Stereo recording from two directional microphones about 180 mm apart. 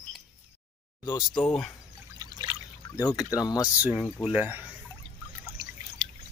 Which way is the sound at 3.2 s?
20° left (ahead or behind).